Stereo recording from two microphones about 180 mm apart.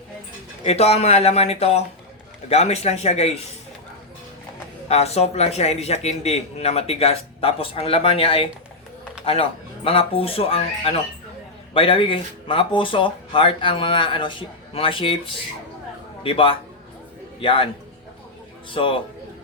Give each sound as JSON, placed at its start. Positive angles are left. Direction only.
{"t": 0.6, "sound": "a man's voice", "side_deg": 35}
{"t": 4.9, "sound": "a man's voice", "side_deg": 35}
{"t": 16.2, "sound": "speech", "side_deg": 30}
{"t": 18.7, "sound": "speech", "side_deg": 30}